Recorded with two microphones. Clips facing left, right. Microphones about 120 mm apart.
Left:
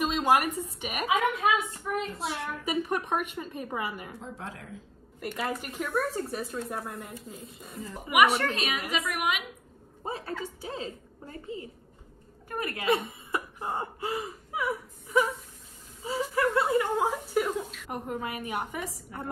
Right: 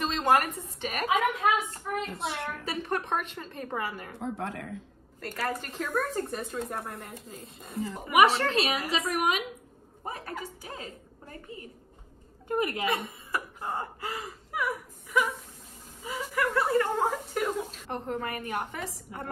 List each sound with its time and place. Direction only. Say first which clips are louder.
0.0 s a woman's voice: even; 10° left (ahead or behind)
2.6 s a woman's voice: left 4 dB; 15° left (ahead or behind)
4.2 s a woman's voice: right 6 dB; 60° right (ahead or behind)
5.2 s a woman's voice: even; 15° left (ahead or behind)
8.4 s a woman's voice: right 3 dB; 30° right (ahead or behind)
10.0 s a woman's voice: left 3 dB; 25° left (ahead or behind)
12.4 s a woman's voice: right 5 dB; 25° right (ahead or behind)
12.8 s a woman's voice: left 3 dB; 30° left (ahead or behind)
16.8 s a woman's voice: even; 10° left (ahead or behind)